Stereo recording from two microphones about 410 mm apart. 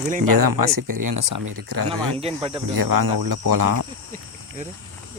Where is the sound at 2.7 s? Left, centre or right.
Right.